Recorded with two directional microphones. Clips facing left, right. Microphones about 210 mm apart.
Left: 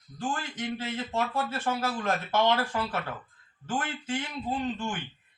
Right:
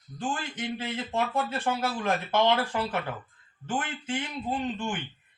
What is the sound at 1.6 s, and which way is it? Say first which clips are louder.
Speech: left 1 dB; 15° right (ahead or behind).